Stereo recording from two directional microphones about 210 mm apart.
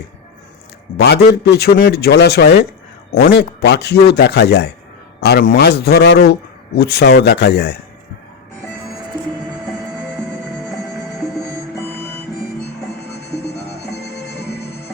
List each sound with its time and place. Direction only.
0.9 s a man's voice: 50° left (ahead or behind)
10.0 s music: centre (ahead or behind)
13.9 s music: 50° left (ahead or behind)